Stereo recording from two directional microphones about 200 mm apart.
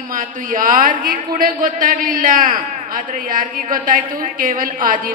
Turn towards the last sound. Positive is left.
turn(degrees=-40)  # may be behind; listen again after turning